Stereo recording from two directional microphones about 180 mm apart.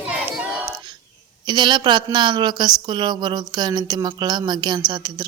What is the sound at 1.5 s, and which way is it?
Speech, 25° right (ahead or behind).